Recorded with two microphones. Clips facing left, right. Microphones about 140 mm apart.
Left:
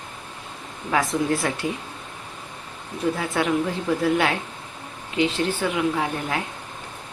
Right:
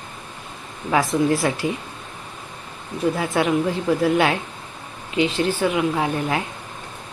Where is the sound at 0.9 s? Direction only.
10° right (ahead or behind).